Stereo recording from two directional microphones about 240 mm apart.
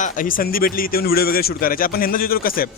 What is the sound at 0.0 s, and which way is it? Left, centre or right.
Speech, left.